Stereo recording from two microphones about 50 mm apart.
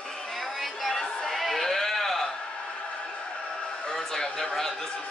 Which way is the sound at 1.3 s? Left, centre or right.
Centre.